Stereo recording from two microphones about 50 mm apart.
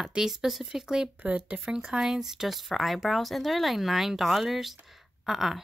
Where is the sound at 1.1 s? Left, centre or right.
Right.